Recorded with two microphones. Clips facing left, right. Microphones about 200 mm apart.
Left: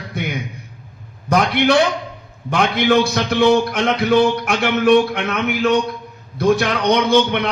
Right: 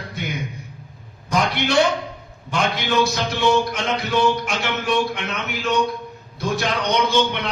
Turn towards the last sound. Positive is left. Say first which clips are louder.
# left 5 dB
turn(degrees=60)  # may be behind; listen again after turning